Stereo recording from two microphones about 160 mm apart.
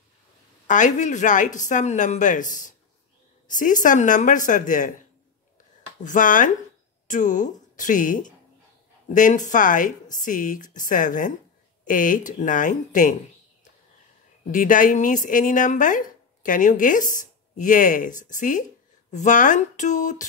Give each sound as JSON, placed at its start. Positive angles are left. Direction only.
{"t": 0.7, "sound": "speech", "side_deg": 50}
{"t": 6.0, "sound": "a woman's voice", "side_deg": 55}
{"t": 14.5, "sound": "speech", "side_deg": 55}